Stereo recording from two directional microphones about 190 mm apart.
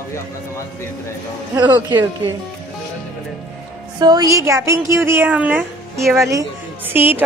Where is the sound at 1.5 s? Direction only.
20° right (ahead or behind).